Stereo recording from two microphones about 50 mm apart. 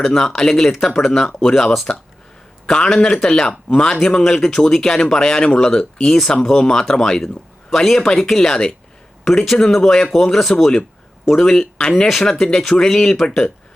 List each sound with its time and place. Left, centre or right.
0.0 s speech: centre